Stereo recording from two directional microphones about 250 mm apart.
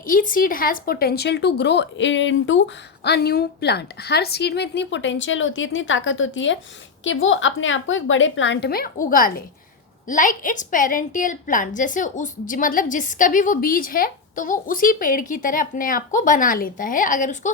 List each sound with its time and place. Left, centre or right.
0.0 s a woman's voice: left